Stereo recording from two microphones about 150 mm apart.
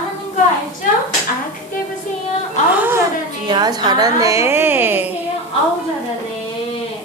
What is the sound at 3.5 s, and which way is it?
A woman's voice, 30° right (ahead or behind).